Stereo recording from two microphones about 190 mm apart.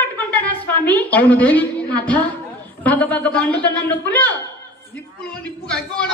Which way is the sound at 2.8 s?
10° left (ahead or behind).